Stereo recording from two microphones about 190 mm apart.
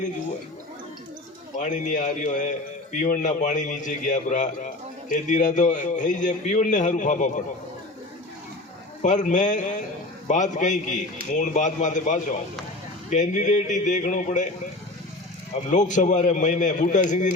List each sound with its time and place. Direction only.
1.5 s a man's voice: 40° left (ahead or behind)
9.0 s a man's voice: 40° left (ahead or behind)
15.7 s a man's voice: 40° left (ahead or behind)